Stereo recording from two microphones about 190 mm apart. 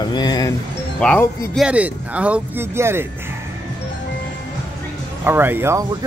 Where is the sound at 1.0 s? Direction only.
5° left (ahead or behind).